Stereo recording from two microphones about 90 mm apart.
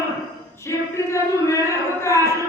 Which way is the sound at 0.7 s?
35° left (ahead or behind).